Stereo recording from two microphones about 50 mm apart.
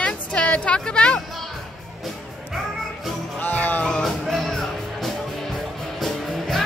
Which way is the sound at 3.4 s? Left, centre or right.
Left.